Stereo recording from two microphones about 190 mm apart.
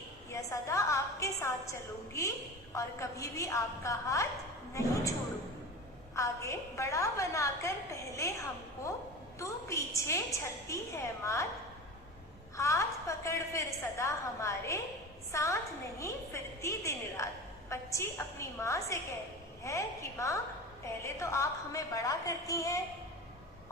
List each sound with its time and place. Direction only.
0.3 s a woman's voice: 15° left (ahead or behind)
6.1 s a woman's voice: 15° left (ahead or behind)
12.5 s a woman's voice: 15° left (ahead or behind)